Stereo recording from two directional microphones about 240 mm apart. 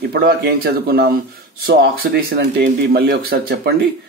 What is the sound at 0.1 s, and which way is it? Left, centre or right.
Speech, right.